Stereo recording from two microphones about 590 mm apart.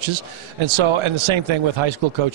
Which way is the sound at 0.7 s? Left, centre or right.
Right.